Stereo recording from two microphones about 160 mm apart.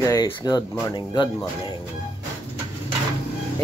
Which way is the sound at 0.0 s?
20° left (ahead or behind).